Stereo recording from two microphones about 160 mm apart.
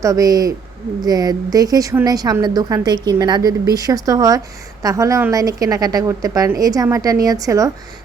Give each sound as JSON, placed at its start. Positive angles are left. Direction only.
{"t": 0.0, "sound": "a woman's voice", "side_deg": -20}